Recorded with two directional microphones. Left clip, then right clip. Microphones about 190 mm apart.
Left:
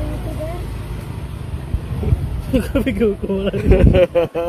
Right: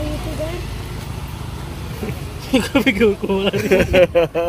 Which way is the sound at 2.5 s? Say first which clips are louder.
Right 3 dB; 50° right (ahead or behind).